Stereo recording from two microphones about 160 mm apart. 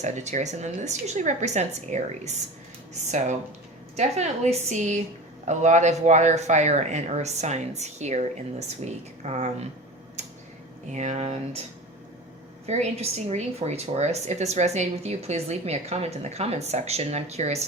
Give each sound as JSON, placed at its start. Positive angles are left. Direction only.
{"t": 0.0, "sound": "speech", "side_deg": -45}
{"t": 10.2, "sound": "tick-tock", "side_deg": -45}
{"t": 10.9, "sound": "speech", "side_deg": -45}
{"t": 12.6, "sound": "speech", "side_deg": -45}